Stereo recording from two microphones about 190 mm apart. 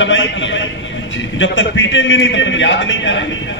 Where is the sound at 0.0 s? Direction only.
75° left (ahead or behind).